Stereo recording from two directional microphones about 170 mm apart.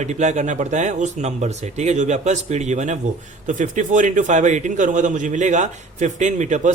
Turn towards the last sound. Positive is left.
turn(degrees=-45)  # may be behind; listen again after turning